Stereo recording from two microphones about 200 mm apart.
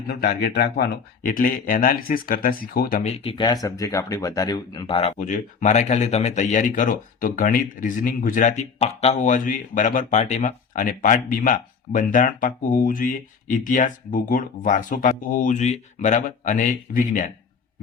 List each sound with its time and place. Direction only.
0.1 s speech: 50° left (ahead or behind)
3.0 s speech: 30° left (ahead or behind)